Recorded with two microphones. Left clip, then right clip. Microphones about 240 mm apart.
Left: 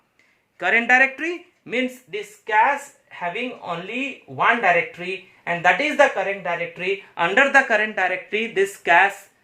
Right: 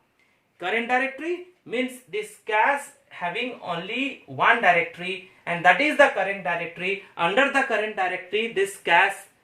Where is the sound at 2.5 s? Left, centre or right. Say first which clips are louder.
Left 5 dB; left.